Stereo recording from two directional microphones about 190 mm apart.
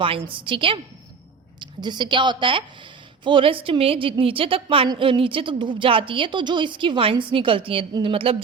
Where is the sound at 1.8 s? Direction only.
25° right (ahead or behind).